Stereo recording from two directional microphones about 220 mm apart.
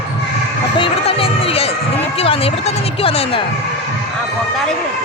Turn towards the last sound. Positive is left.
turn(degrees=25)  # may be behind; listen again after turning